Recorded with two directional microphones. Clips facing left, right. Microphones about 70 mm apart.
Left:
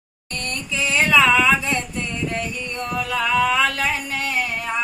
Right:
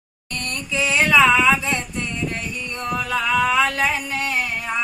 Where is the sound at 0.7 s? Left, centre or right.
Right.